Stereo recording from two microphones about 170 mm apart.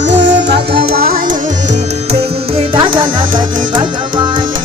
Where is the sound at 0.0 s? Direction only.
90° right; by 1.8 s 50° right (ahead or behind).